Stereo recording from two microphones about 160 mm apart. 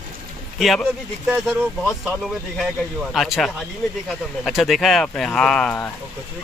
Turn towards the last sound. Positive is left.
turn(degrees=5)  # may be behind; listen again after turning